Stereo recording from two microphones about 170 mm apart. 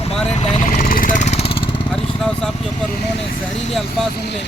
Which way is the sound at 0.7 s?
55° left (ahead or behind).